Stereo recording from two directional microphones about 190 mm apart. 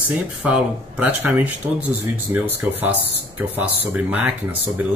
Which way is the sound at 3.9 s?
10° right (ahead or behind).